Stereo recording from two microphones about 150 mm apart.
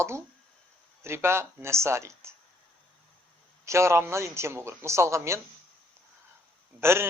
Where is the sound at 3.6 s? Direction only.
20° right (ahead or behind).